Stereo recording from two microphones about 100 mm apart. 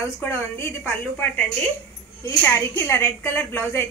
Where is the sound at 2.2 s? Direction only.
30° left (ahead or behind).